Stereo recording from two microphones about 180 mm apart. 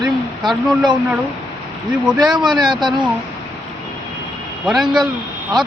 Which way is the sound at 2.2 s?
25° right (ahead or behind).